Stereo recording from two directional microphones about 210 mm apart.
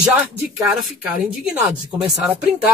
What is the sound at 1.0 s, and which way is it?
Speech, 5° right (ahead or behind).